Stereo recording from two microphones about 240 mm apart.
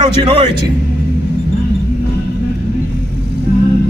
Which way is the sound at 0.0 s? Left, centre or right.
Right.